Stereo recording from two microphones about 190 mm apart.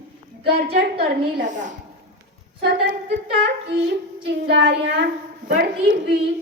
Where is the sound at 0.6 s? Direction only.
55° right (ahead or behind).